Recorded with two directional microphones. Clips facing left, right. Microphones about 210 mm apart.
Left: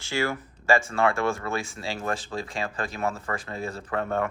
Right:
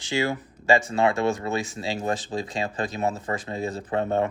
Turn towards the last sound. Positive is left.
turn(degrees=-20)  # may be behind; listen again after turning